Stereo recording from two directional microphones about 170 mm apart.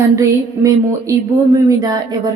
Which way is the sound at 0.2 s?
20° right (ahead or behind).